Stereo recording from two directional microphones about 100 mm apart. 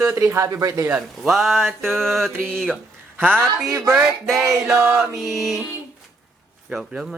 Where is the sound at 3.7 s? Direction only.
35° right (ahead or behind).